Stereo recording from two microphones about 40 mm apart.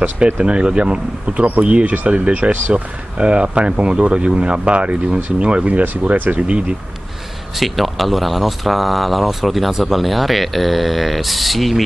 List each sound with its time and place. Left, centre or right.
0.2 s speech: right
7.5 s speech: centre